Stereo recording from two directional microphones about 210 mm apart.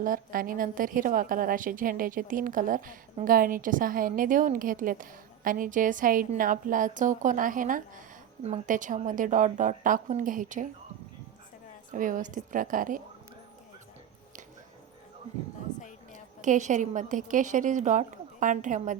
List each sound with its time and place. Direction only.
0.0 s a woman's voice: 40° right (ahead or behind)
11.9 s a woman's voice: 40° right (ahead or behind)
16.1 s a woman's voice: 35° right (ahead or behind)